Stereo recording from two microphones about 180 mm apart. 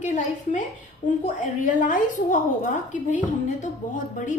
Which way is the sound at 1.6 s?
50° left (ahead or behind).